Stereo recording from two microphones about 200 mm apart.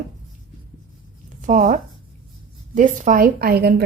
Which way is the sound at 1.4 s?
40° right (ahead or behind).